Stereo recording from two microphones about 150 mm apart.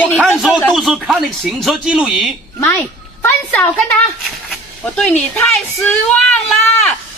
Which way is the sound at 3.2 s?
10° left (ahead or behind).